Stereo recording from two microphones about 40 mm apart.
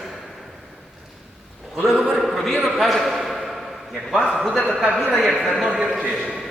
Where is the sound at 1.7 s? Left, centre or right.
Centre.